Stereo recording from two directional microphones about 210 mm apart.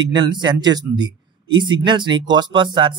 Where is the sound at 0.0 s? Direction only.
20° right (ahead or behind).